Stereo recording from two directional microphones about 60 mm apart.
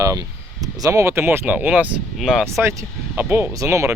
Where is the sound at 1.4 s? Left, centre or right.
Right.